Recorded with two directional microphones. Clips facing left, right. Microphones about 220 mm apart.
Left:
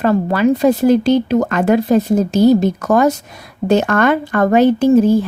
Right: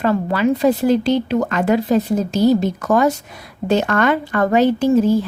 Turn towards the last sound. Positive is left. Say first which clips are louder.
# left 4 dB
turn(degrees=50)  # may be behind; listen again after turning